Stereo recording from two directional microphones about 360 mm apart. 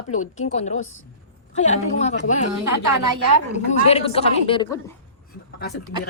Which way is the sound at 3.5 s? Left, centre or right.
Centre.